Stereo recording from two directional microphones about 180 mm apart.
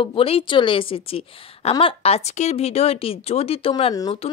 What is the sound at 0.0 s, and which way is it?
Speech, 30° left (ahead or behind).